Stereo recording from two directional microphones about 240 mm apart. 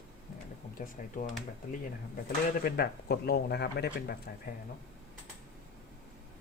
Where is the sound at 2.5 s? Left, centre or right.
Left.